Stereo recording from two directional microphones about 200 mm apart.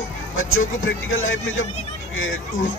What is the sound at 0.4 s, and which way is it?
Speech, 80° left.